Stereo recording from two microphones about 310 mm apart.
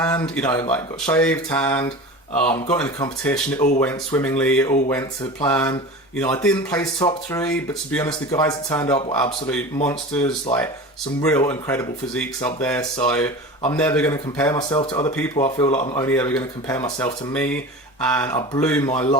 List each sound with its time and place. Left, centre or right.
0.0 s speech: centre
16.0 s speech: centre